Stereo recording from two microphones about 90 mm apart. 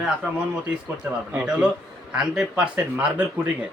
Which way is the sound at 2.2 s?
10° right (ahead or behind).